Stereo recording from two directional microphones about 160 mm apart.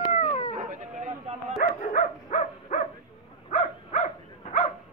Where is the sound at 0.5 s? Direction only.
50° right (ahead or behind).